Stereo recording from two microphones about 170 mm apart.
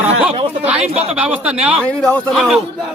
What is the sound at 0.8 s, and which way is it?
Speech, 40° right (ahead or behind).